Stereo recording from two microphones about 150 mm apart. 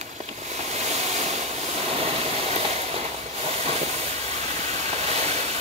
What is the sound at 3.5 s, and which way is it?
Train, 45° right (ahead or behind).